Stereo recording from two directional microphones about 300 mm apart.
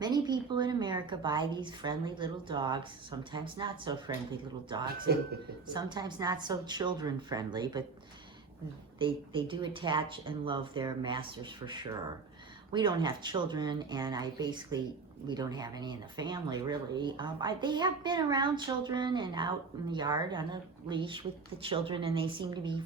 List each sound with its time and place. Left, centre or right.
0.0 s speech: centre
5.6 s speech: centre
9.0 s speech: centre